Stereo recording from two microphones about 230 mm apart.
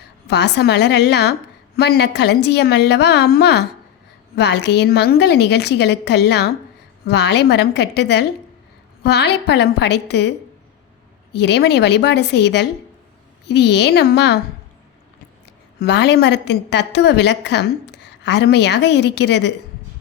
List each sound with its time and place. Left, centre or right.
0.3 s a woman's voice: left
11.3 s a woman's voice: left
15.8 s a woman's voice: left